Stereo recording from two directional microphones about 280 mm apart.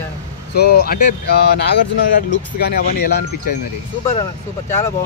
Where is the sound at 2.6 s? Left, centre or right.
Left.